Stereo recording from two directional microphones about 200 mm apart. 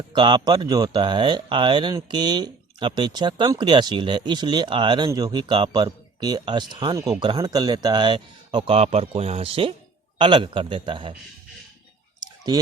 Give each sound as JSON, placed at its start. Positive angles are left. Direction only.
{"t": 0.1, "sound": "speech", "side_deg": -25}